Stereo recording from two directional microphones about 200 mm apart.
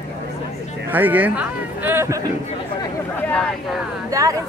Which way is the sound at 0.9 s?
10° right (ahead or behind).